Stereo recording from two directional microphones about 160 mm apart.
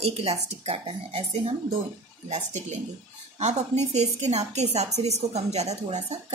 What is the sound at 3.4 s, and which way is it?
Speech, 45° right (ahead or behind).